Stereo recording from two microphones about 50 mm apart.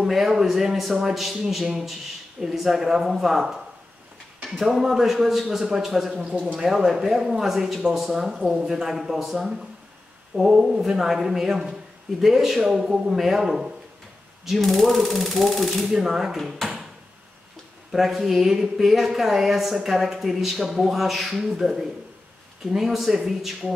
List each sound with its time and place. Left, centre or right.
0.0 s a man's voice: centre
16.5 s a sound: centre
17.9 s speech: centre